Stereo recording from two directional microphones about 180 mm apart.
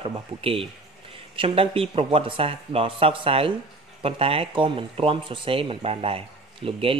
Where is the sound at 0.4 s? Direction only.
30° right (ahead or behind).